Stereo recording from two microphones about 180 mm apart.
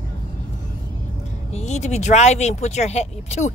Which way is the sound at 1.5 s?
40° left (ahead or behind).